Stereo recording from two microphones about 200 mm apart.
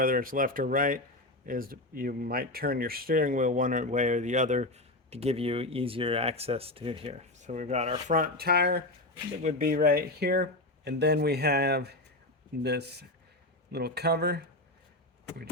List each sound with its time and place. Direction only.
0.0 s speech: 45° right (ahead or behind)
9.4 s speech: 40° right (ahead or behind)